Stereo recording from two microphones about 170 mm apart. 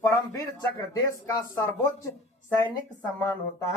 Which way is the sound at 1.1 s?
20° left (ahead or behind).